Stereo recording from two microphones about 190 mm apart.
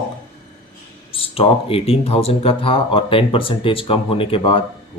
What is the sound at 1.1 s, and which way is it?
Speech, 30° left (ahead or behind).